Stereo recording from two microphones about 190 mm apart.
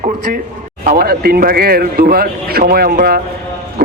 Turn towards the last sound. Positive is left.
turn(degrees=-50)  # may be behind; listen again after turning